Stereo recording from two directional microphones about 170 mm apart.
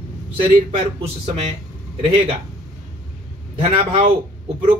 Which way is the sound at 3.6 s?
35° right (ahead or behind).